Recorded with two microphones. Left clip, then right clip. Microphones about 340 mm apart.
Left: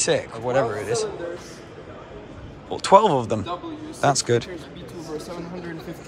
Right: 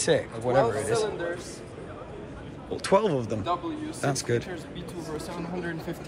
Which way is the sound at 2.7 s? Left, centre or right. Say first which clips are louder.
Left 8 dB; centre.